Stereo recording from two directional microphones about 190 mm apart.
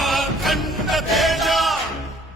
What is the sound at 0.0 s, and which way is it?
Chant, centre (ahead or behind).